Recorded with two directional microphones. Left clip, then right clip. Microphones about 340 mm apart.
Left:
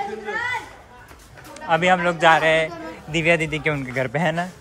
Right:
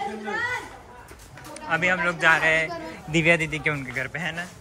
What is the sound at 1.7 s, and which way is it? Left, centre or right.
A man's voice, centre.